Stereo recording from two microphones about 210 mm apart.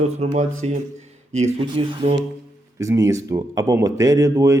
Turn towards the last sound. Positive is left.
turn(degrees=-15)  # may be behind; listen again after turning